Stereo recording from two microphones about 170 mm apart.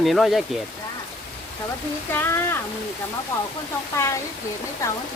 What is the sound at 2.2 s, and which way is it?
Speech, 15° left (ahead or behind).